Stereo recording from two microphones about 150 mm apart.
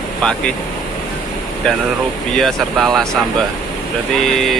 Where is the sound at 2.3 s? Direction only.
Centre (ahead or behind).